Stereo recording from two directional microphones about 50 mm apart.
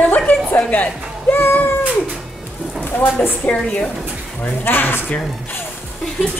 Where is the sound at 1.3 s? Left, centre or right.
Left.